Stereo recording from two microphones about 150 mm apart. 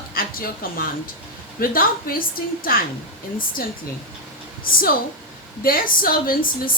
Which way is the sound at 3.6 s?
80° left.